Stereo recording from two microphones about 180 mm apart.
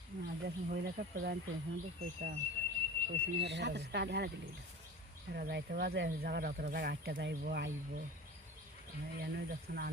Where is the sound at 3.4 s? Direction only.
75° right (ahead or behind).